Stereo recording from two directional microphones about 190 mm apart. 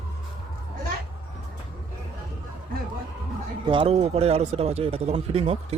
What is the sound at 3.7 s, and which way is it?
Speech, 30° right (ahead or behind).